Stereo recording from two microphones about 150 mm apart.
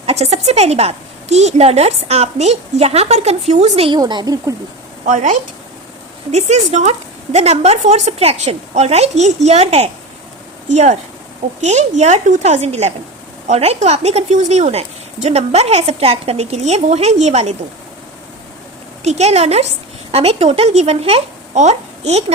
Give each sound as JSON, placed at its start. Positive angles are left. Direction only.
{"t": 0.0, "sound": "a woman's voice", "side_deg": -45}
{"t": 3.9, "sound": "speech", "side_deg": -30}
{"t": 5.0, "sound": "a woman's voice", "side_deg": -55}
{"t": 19.0, "sound": "a woman's voice", "side_deg": -45}